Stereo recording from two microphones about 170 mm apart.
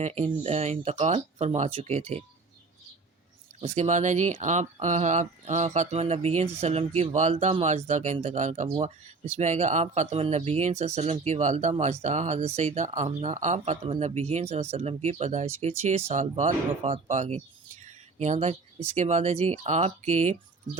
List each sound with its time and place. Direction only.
0.0 s speech: 35° right (ahead or behind)
3.6 s speech: 40° right (ahead or behind)